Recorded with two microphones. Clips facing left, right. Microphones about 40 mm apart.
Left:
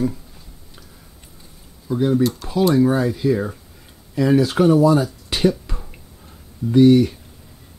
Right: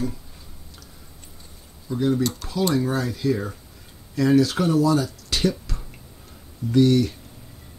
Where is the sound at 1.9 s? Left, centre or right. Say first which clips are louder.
Left 4 dB; centre.